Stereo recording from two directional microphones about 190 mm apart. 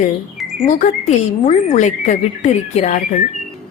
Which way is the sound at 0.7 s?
40° left (ahead or behind).